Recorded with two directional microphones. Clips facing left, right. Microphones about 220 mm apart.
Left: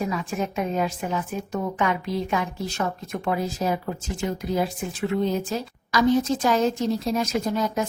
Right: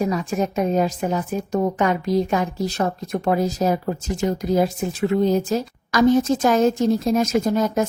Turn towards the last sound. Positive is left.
turn(degrees=-45)  # may be behind; listen again after turning